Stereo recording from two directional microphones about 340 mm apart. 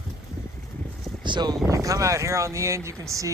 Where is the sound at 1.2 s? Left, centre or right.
Centre.